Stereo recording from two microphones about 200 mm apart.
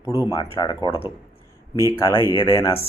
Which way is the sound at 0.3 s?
20° left (ahead or behind).